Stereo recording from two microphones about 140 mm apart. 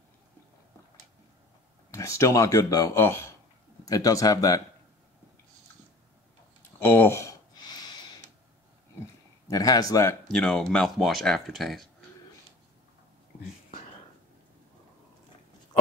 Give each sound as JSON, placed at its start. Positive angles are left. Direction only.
{"t": 1.9, "sound": "speech", "side_deg": 20}
{"t": 6.8, "sound": "a sound", "side_deg": 15}
{"t": 9.5, "sound": "speech", "side_deg": 25}
{"t": 10.3, "sound": "speech", "side_deg": 5}